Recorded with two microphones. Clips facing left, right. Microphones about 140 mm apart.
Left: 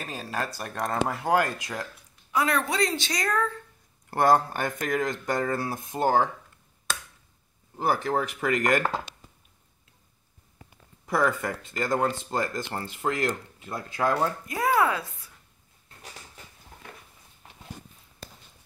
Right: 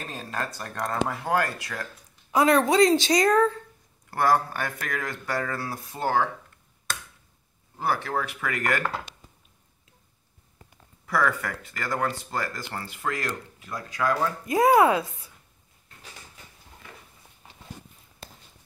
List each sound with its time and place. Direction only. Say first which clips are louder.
0.0 s speech: left 1 dB; 5° left (ahead or behind)
2.3 s speech: right 6 dB; 30° right (ahead or behind)
4.2 s speech: left 2 dB; 20° left (ahead or behind)
8.0 s speech: left 3 dB; 25° left (ahead or behind)
11.1 s speech: left 1 dB; 20° left (ahead or behind)
14.5 s speech: right 7 dB; 20° right (ahead or behind)